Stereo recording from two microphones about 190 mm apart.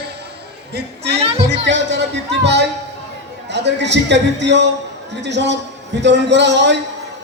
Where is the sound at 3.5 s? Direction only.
65° right (ahead or behind).